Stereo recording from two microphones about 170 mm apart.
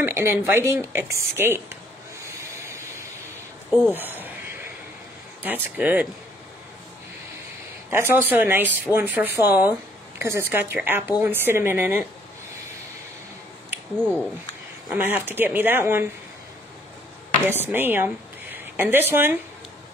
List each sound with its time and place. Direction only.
0.0 s speech: 15° right (ahead or behind)
5.4 s a woman's voice: 10° right (ahead or behind)
7.9 s a woman's voice: 15° right (ahead or behind)
13.9 s speech: 5° left (ahead or behind)
14.9 s a woman's voice: 10° right (ahead or behind)
17.5 s a woman's voice: 10° right (ahead or behind)